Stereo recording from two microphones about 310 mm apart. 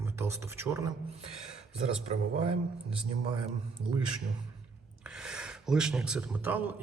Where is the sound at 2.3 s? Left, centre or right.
Centre.